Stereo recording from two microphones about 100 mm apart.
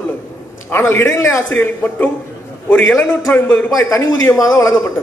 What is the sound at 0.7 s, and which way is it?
A man's voice, 25° left (ahead or behind).